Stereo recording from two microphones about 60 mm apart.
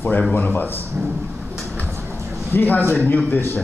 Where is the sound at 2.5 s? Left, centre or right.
Left.